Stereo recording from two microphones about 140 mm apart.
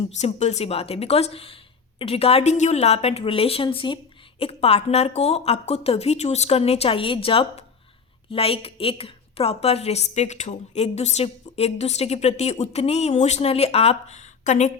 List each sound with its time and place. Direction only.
0.2 s a woman's voice: 55° left (ahead or behind)